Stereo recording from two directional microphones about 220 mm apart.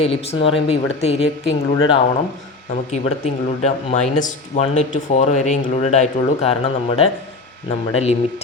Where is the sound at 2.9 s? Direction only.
30° left (ahead or behind).